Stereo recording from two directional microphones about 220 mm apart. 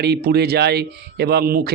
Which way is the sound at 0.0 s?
45° right (ahead or behind).